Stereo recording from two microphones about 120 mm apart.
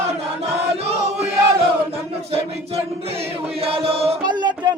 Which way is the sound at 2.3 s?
55° right (ahead or behind).